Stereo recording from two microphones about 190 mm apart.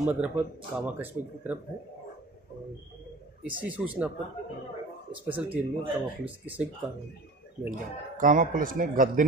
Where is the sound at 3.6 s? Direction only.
10° right (ahead or behind).